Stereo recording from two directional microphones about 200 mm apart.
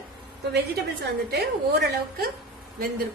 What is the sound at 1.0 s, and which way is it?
Speech, 55° right (ahead or behind).